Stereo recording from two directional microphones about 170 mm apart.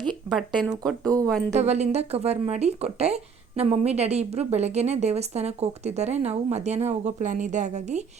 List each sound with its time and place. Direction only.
0.1 s speech: centre (ahead or behind)
1.0 s speech: 20° right (ahead or behind)
1.5 s speech: 40° right (ahead or behind)